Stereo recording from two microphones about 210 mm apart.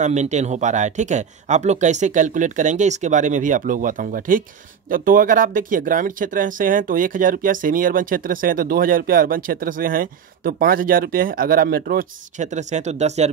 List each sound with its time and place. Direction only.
0.0 s speech: 35° right (ahead or behind)